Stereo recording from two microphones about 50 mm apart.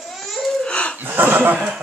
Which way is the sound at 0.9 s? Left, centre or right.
Right.